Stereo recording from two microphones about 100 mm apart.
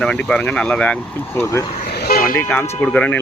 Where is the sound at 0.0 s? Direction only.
10° left (ahead or behind).